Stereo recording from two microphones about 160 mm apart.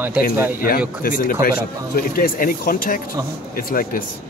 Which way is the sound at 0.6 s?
65° left (ahead or behind).